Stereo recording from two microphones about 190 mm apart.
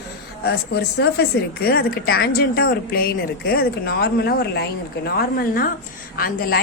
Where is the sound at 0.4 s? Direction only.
60° left (ahead or behind).